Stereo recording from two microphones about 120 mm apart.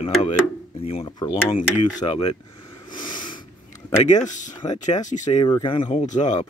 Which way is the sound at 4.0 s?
80° left.